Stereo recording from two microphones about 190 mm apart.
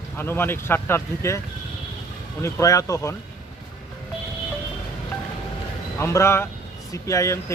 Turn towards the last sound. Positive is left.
turn(degrees=15)  # may be behind; listen again after turning